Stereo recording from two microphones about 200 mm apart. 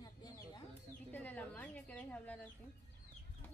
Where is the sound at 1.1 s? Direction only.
10° left (ahead or behind).